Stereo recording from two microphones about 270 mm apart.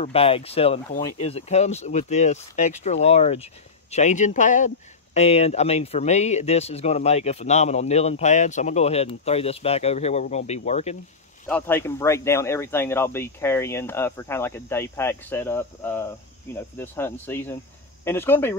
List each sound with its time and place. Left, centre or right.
0.0 s speech: left
11.4 s speech: centre